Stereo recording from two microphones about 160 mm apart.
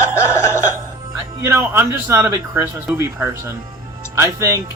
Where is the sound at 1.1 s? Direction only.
15° right (ahead or behind).